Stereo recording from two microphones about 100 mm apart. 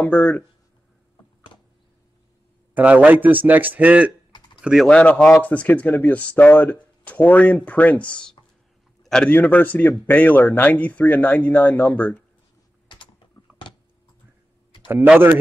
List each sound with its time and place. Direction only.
0.0 s speech: 10° left (ahead or behind)
2.7 s speech: 15° right (ahead or behind)
4.8 s speech: 10° left (ahead or behind)
9.0 s a sound: 5° left (ahead or behind)
9.3 s speech: 15° left (ahead or behind)
12.8 s typing: 50° left (ahead or behind)
14.7 s a sound: 50° left (ahead or behind)